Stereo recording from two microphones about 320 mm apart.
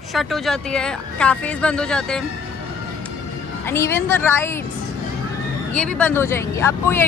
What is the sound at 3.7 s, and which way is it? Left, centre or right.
Speech, centre.